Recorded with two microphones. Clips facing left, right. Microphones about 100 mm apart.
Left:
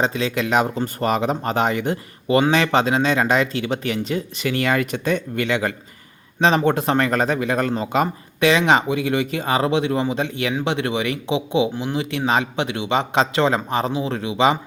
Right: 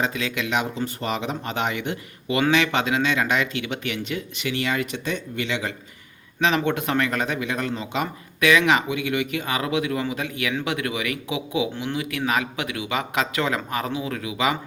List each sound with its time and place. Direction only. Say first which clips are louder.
0.0 s speech: left 5 dB; 30° left (ahead or behind); by 5.7 s 50° left (ahead or behind)
6.4 s a man's voice: left 5 dB; 35° left (ahead or behind)